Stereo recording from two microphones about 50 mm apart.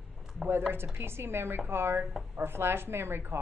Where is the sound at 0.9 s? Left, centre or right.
Right.